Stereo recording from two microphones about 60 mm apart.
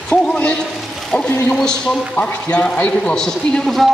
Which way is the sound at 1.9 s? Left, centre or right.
Left.